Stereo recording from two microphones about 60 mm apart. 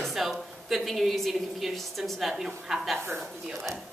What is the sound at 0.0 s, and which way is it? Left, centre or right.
Speech, centre.